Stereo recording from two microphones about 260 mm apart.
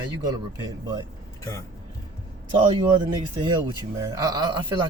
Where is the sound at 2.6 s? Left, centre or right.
Right.